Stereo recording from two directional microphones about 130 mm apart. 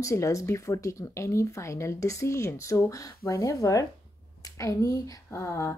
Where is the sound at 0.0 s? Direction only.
25° left (ahead or behind).